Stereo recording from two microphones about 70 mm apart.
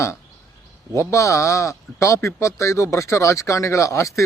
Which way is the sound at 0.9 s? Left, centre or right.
Left.